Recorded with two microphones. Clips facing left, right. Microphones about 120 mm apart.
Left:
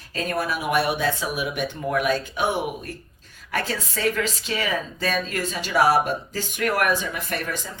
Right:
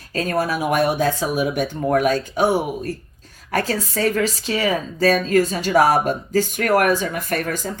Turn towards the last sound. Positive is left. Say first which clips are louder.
# right 5 dB
turn(degrees=-45)  # may be behind; listen again after turning